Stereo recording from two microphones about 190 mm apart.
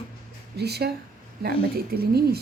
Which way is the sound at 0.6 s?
60° right (ahead or behind).